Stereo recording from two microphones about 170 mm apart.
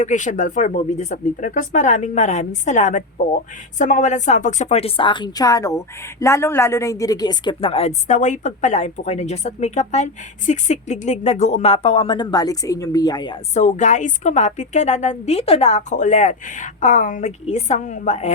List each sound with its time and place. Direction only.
0.0 s a woman's voice: 45° left (ahead or behind); by 13.4 s 25° left (ahead or behind)
13.5 s a woman's voice: 45° left (ahead or behind)